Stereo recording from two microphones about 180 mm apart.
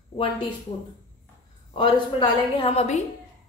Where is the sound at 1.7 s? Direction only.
25° left (ahead or behind).